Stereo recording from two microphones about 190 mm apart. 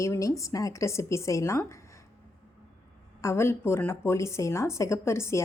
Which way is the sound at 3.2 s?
15° left (ahead or behind).